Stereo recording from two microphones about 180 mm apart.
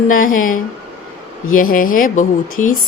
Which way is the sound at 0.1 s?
50° left (ahead or behind).